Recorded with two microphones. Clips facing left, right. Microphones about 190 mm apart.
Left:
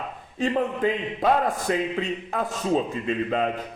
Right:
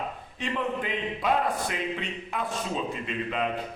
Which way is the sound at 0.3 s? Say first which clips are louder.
Left 6 dB; 40° left (ahead or behind).